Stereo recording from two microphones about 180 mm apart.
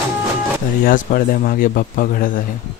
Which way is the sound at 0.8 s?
50° left (ahead or behind).